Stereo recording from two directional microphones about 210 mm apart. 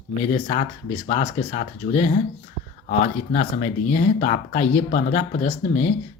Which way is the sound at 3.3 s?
35° left (ahead or behind).